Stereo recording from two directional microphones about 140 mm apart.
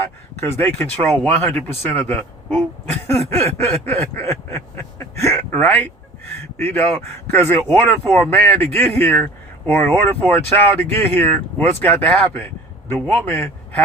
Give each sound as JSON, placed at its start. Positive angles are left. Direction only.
{"t": 0.3, "sound": "speech", "side_deg": 20}
{"t": 3.1, "sound": "a sound", "side_deg": 20}
{"t": 5.5, "sound": "speech", "side_deg": 15}